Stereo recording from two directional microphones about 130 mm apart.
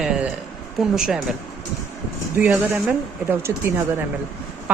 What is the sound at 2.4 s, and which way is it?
Speech, 15° right (ahead or behind).